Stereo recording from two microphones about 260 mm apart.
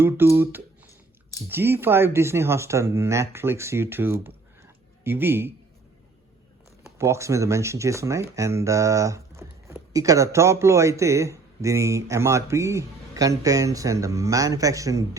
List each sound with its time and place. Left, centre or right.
0.0 s speech: centre
6.8 s speech: centre